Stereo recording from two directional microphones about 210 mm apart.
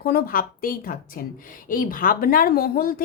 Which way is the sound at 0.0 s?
45° left (ahead or behind).